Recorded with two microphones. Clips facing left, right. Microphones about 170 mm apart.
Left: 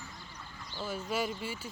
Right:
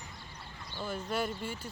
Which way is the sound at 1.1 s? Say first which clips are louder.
Even; 5° left (ahead or behind).